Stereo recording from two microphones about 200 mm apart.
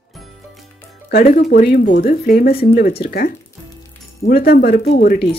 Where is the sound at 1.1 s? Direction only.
45° left (ahead or behind).